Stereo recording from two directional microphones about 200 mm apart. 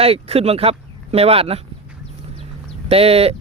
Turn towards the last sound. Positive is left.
turn(degrees=-30)  # may be behind; listen again after turning